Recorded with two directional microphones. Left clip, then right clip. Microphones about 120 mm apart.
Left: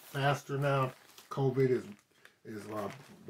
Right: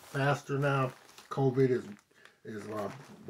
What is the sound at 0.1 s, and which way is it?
Speech, 25° left (ahead or behind).